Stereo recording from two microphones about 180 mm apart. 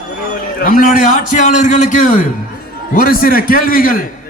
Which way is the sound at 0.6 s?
50° left (ahead or behind).